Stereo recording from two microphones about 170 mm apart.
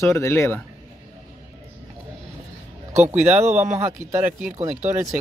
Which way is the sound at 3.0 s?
15° right (ahead or behind).